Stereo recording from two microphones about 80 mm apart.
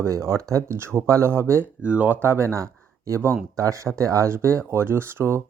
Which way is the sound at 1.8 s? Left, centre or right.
Centre.